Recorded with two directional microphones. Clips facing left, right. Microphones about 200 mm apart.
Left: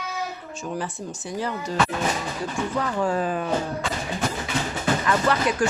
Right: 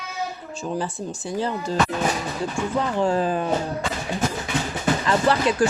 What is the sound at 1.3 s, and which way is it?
Speech, 30° right (ahead or behind).